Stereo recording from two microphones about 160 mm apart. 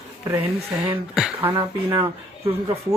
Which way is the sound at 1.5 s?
20° right (ahead or behind).